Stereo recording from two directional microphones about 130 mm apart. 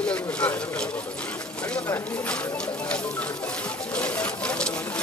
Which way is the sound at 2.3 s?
10° left (ahead or behind).